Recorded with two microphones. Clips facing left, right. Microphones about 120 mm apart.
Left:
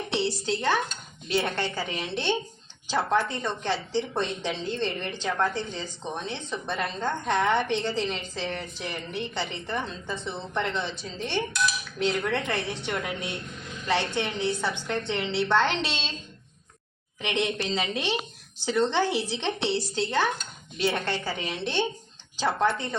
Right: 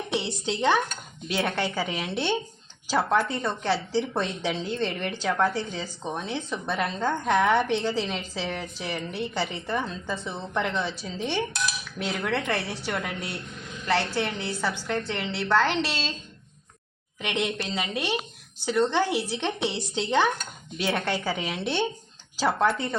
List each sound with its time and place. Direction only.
0.1 s a woman's voice: 20° right (ahead or behind)
17.2 s a woman's voice: 5° right (ahead or behind)